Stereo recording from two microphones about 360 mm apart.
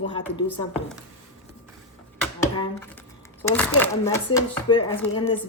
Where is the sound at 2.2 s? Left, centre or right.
Centre.